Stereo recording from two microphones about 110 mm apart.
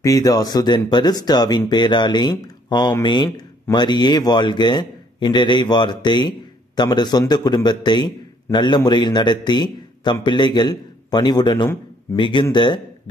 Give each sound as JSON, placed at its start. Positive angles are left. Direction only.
{"t": 0.0, "sound": "a man's voice", "side_deg": 30}